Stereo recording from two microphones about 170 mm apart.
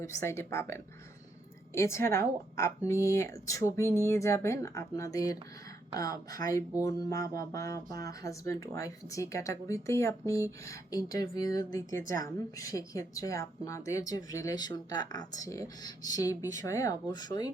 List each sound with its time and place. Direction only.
0.0 s a woman's voice: 15° left (ahead or behind)